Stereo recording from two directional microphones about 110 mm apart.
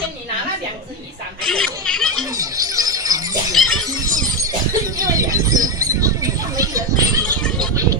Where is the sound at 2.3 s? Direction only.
35° right (ahead or behind).